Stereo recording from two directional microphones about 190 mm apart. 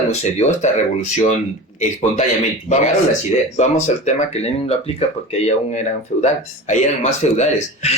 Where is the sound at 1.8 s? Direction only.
40° left (ahead or behind).